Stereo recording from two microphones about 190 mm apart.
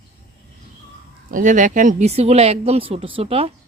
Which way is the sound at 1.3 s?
45° right (ahead or behind).